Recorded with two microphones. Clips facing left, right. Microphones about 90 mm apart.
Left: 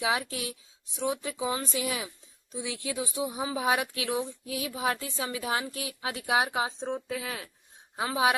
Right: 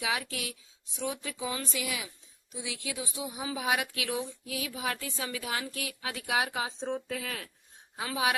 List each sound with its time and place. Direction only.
0.0 s a woman's voice: 30° left (ahead or behind)
7.9 s speech: 30° left (ahead or behind)